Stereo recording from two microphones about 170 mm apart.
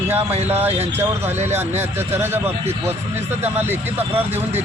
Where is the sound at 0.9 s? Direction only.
15° right (ahead or behind).